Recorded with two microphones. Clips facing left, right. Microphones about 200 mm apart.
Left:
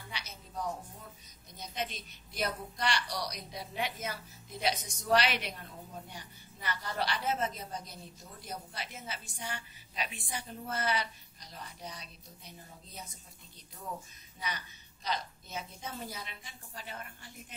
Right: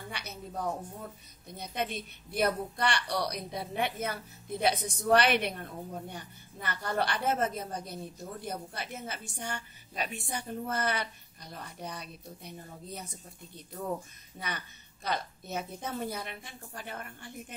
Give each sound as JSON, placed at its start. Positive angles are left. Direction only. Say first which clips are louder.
{"t": 0.1, "sound": "music", "louder": "right 2 dB", "side_deg": -55}
{"t": 1.6, "sound": "a woman's voice", "louder": "right 5 dB", "side_deg": -55}
{"t": 15.0, "sound": "a woman's voice", "louder": "right 3 dB", "side_deg": -55}